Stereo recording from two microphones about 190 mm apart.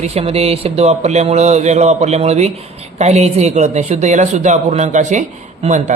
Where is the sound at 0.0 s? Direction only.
35° right (ahead or behind).